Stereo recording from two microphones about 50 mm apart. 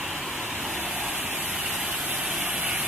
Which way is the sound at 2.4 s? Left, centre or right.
Right.